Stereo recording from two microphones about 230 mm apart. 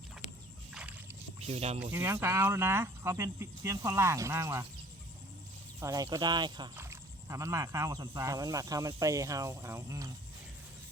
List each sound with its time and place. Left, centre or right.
0.7 s rowboat: centre
1.4 s speech: right
1.8 s speech: centre
5.8 s speech: centre